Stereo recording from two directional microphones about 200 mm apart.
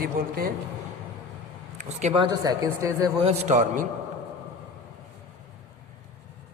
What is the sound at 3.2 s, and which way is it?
Speech, 35° right (ahead or behind).